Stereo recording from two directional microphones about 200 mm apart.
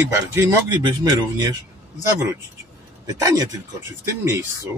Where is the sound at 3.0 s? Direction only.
20° right (ahead or behind).